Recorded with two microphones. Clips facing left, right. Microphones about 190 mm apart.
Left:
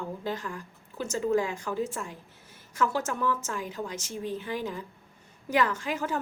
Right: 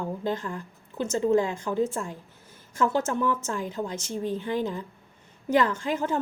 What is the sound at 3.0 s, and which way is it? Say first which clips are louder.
Speech: right 3 dB; 25° right (ahead or behind).